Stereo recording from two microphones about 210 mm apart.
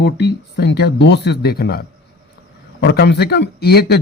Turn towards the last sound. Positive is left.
turn(degrees=50)  # may be behind; listen again after turning